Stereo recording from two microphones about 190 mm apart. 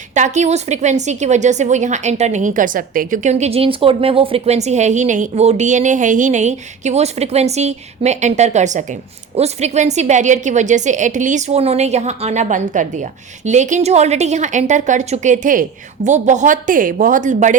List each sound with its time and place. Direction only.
0.1 s a woman's voice: 40° right (ahead or behind)